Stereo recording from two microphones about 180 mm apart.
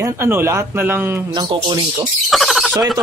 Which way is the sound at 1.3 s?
25° right (ahead or behind).